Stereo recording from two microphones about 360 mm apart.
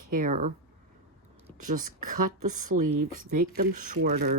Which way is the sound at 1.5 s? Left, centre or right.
Right.